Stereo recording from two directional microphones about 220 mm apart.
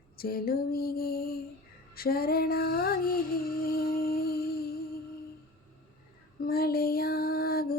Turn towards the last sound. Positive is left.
turn(degrees=45)  # may be behind; listen again after turning